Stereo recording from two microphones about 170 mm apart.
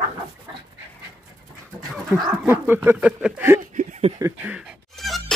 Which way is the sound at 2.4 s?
10° right (ahead or behind).